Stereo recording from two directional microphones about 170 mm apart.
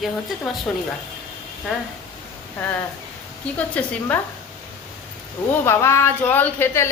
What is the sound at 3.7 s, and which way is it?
Speech, 10° left (ahead or behind).